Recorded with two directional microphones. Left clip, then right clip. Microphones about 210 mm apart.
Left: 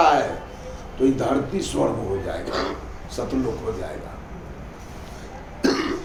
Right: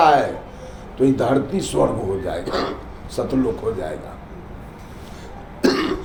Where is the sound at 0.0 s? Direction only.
35° right (ahead or behind).